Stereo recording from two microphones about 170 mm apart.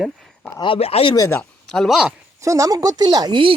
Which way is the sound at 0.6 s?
35° left (ahead or behind).